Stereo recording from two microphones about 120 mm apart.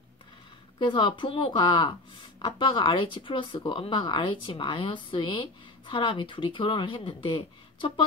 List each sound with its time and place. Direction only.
0.7 s speech: 40° left (ahead or behind)